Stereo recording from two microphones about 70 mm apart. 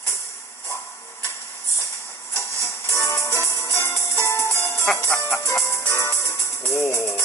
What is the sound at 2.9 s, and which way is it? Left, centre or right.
Music, left.